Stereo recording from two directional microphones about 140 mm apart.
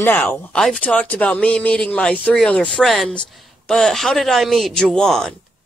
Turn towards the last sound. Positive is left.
turn(degrees=5)  # may be behind; listen again after turning